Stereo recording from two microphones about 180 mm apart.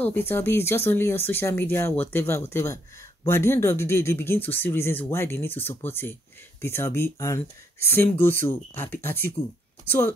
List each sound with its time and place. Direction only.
0.0 s speech: 10° left (ahead or behind)